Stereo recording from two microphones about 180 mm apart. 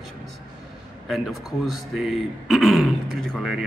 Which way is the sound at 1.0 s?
Centre (ahead or behind).